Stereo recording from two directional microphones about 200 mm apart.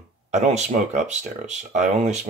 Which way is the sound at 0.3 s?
35° right (ahead or behind).